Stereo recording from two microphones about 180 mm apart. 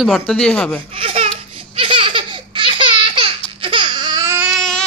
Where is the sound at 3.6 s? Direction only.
30° right (ahead or behind).